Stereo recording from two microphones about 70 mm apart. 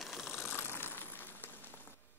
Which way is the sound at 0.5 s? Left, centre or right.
Left.